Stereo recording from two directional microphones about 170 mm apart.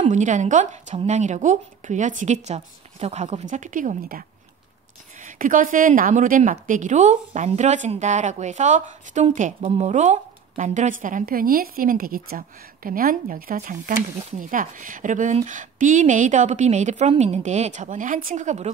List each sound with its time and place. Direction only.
0.0 s a woman's voice: 45° right (ahead or behind)
5.2 s a woman's voice: 50° right (ahead or behind)
9.6 s a woman's voice: 35° right (ahead or behind)